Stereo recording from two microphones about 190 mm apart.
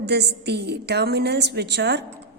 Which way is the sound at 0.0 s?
60° right (ahead or behind).